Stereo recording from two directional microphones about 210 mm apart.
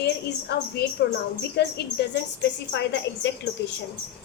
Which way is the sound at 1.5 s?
50° left (ahead or behind).